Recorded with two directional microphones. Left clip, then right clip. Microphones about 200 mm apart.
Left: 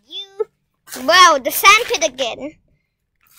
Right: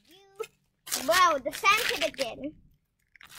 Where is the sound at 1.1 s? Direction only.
25° left (ahead or behind).